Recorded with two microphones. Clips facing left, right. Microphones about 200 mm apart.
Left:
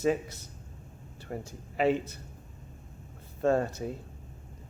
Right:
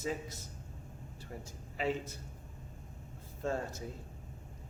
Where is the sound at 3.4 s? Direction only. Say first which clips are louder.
Left 10 dB; 70° left (ahead or behind).